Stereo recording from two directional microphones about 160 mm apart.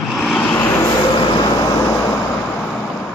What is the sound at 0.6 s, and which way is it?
Vehicle, 20° left (ahead or behind).